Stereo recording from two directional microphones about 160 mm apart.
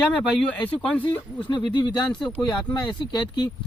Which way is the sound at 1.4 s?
30° left (ahead or behind).